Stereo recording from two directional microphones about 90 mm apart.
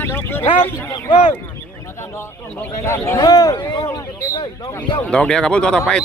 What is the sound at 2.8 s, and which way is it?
Speech, 30° left (ahead or behind).